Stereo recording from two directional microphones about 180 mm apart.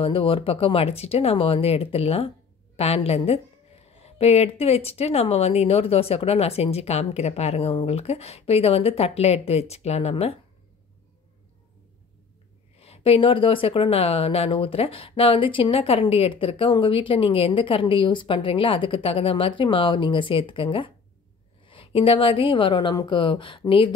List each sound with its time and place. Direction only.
0.0 s speech: 30° left (ahead or behind)
12.7 s speech: 35° left (ahead or behind)